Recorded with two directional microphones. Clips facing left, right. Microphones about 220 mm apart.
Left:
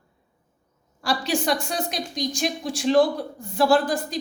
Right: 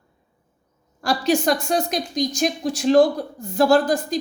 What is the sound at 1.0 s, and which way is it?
A woman's voice, 45° right (ahead or behind).